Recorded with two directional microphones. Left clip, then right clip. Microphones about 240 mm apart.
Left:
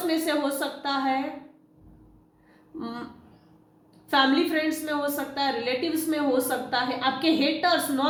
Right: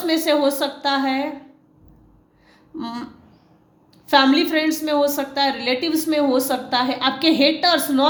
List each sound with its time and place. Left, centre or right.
0.1 s a woman's voice: right
2.7 s speech: right
4.1 s a woman's voice: right